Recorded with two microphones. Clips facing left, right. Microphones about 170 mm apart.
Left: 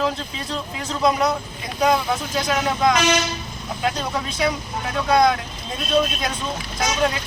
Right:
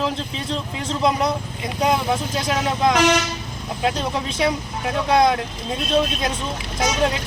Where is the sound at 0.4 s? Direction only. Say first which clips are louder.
Right 1 dB; 25° right (ahead or behind).